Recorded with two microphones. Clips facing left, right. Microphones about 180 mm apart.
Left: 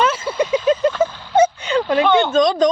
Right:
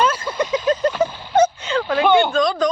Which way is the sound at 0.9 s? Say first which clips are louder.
Left 2 dB; 10° right (ahead or behind).